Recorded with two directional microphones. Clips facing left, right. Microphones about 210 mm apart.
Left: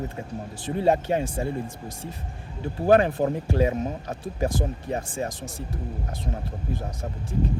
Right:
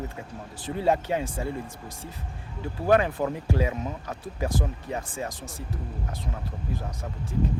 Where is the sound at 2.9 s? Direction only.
30° left (ahead or behind).